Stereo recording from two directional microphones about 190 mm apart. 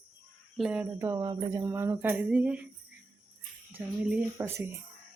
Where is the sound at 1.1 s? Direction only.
20° right (ahead or behind).